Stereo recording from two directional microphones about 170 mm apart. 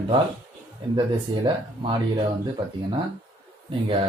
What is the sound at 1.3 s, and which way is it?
Speech, 25° right (ahead or behind).